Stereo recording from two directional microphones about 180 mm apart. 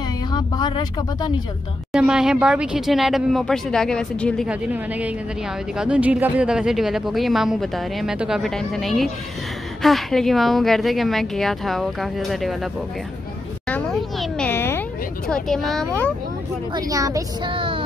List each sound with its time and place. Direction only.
0.3 s speech: 25° left (ahead or behind)
1.9 s speech: 5° right (ahead or behind)
4.5 s a woman's voice: 10° right (ahead or behind)
13.7 s a child's voice: 5° left (ahead or behind)
16.7 s speech: 20° right (ahead or behind)